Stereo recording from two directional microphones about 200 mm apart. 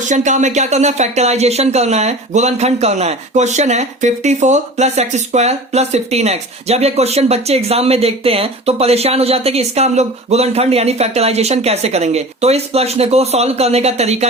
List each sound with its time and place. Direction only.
0.1 s speech: 35° right (ahead or behind)